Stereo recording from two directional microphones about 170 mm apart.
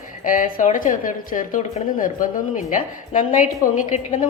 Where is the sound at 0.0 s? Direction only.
50° left (ahead or behind).